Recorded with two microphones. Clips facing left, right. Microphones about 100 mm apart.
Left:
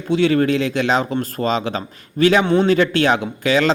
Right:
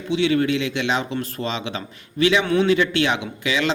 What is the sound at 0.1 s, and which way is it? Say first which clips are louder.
A man's voice: left 4 dB; 45° left (ahead or behind).